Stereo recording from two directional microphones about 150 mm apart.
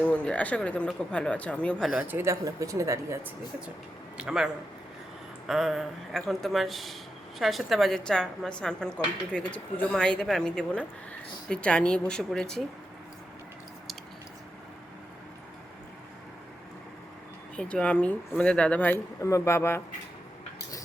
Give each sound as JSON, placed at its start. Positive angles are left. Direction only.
{"t": 0.0, "sound": "speech", "side_deg": 10}
{"t": 1.9, "sound": "speech", "side_deg": -10}
{"t": 4.2, "sound": "speech", "side_deg": -5}
{"t": 17.6, "sound": "speech", "side_deg": 5}